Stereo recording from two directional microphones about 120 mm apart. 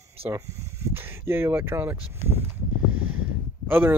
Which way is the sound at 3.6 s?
15° right (ahead or behind).